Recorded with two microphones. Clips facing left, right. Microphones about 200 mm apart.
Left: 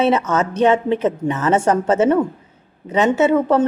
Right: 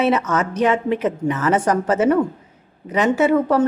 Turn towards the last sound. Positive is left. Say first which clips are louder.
# left 1 dB
turn(degrees=25)  # may be behind; listen again after turning